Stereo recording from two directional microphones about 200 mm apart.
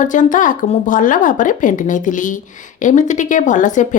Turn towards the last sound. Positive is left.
turn(degrees=40)  # may be behind; listen again after turning